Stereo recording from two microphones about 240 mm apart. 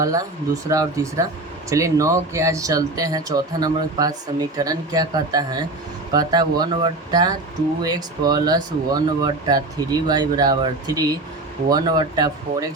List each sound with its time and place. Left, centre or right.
0.0 s speech: centre